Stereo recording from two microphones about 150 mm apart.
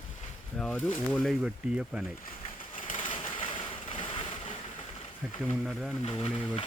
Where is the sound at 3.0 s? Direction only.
35° left (ahead or behind).